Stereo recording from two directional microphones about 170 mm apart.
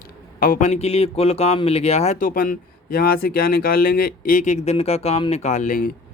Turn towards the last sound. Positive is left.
turn(degrees=50)  # may be behind; listen again after turning